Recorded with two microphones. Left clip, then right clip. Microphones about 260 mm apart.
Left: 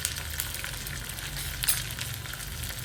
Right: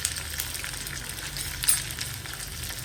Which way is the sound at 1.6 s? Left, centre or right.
Centre.